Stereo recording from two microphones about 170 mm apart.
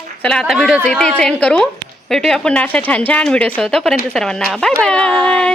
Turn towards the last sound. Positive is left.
turn(degrees=5)  # may be behind; listen again after turning